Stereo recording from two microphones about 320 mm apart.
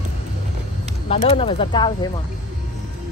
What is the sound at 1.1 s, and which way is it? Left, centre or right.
Speech, centre.